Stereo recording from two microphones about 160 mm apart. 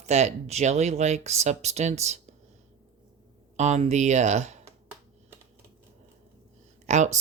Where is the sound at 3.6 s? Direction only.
45° right (ahead or behind).